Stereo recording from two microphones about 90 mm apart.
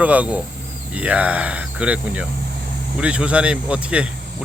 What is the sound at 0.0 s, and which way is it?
Speech, 15° right (ahead or behind).